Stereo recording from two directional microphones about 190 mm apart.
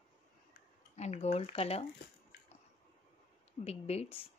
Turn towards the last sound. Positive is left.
turn(degrees=30)  # may be behind; listen again after turning